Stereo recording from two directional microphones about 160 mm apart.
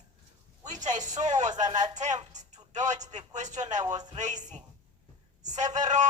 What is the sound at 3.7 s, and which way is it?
Speech, 25° right (ahead or behind).